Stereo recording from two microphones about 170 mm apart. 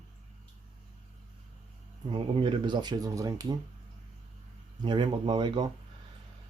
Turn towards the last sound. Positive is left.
turn(degrees=-25)  # may be behind; listen again after turning